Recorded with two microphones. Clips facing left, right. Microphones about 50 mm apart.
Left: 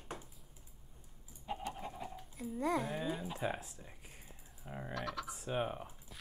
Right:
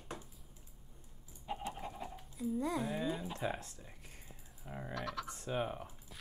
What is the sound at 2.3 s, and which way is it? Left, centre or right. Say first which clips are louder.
Speech: left 1 dB; left.